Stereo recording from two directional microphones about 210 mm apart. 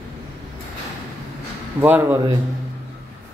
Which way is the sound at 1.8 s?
10° right (ahead or behind).